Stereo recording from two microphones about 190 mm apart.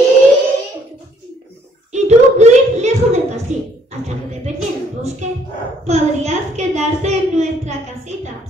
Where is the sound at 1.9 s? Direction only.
35° right (ahead or behind).